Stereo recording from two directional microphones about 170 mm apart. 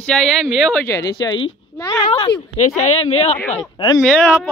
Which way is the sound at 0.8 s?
20° left (ahead or behind).